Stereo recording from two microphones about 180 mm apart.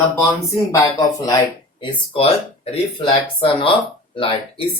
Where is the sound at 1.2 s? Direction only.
25° left (ahead or behind).